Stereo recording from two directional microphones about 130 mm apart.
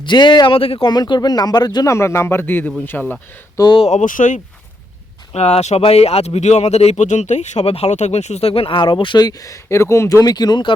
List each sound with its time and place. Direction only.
0.0 s speech: 35° left (ahead or behind)
0.9 s speech: 35° left (ahead or behind); by 3.2 s 15° left (ahead or behind)
3.6 s speech: 40° left (ahead or behind)
3.8 s speech: 75° left (ahead or behind)
5.3 s speech: 55° left (ahead or behind); by 10.8 s 35° left (ahead or behind)